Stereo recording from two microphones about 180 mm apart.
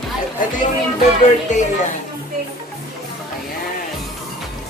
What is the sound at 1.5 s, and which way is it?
Speech, 40° left (ahead or behind).